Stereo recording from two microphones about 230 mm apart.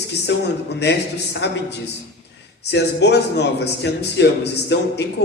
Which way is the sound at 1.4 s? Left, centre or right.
Left.